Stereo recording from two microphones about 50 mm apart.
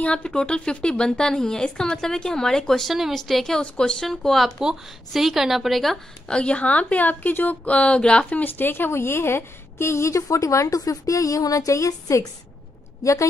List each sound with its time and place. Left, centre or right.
0.0 s a woman's voice: centre
3.5 s a woman's voice: centre
4.1 s speech: centre
6.2 s speech: left
7.7 s speech: left
8.3 s a woman's voice: left